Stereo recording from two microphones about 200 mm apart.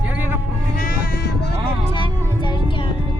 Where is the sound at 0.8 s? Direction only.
45° left (ahead or behind).